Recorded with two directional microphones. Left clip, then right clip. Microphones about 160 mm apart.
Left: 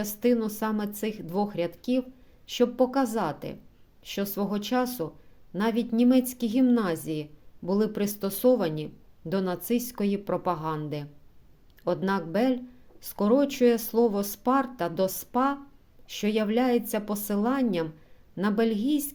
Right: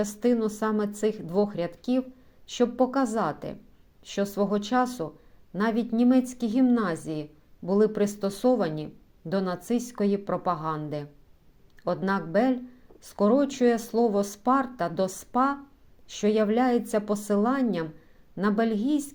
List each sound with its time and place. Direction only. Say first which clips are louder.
0.0 s speech: right 1 dB; 10° left (ahead or behind)